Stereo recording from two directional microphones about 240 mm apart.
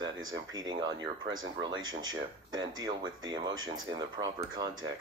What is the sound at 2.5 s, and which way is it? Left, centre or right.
Speech, centre.